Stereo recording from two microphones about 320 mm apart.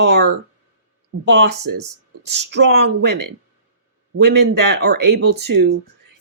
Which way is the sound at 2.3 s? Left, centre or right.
Right.